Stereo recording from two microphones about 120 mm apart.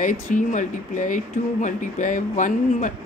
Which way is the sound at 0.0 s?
90° left.